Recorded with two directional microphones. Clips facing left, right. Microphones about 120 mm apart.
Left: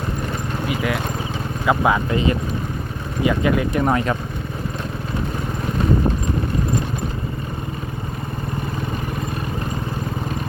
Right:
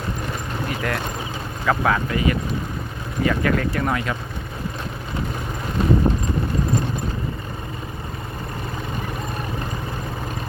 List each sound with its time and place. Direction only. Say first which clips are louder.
0.7 s speech: left 3 dB; 5° left (ahead or behind)
1.6 s speech: left 2 dB; 15° left (ahead or behind)
3.2 s speech: left 2 dB; 15° left (ahead or behind)